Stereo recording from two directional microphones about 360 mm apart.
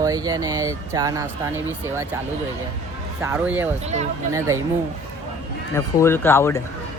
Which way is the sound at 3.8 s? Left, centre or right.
Centre.